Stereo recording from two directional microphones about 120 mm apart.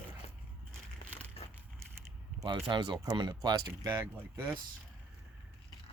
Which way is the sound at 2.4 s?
40° right (ahead or behind).